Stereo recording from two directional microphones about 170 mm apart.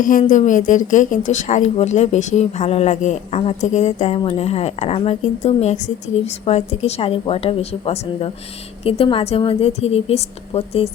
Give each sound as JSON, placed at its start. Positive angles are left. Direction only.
{"t": 0.0, "sound": "a woman's voice", "side_deg": 50}